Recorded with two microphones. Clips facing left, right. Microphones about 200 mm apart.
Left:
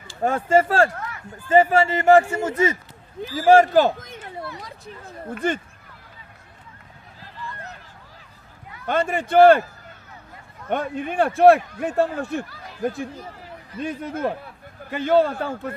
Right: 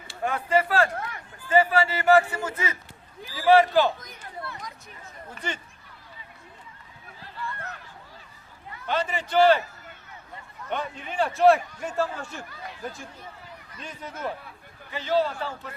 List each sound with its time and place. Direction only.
0.2 s a man's voice: 45° left (ahead or behind)
5.4 s a man's voice: 50° left (ahead or behind)
8.9 s a man's voice: 50° left (ahead or behind)
10.7 s a man's voice: 50° left (ahead or behind)